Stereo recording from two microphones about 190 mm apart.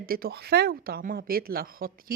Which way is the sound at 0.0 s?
50° right (ahead or behind).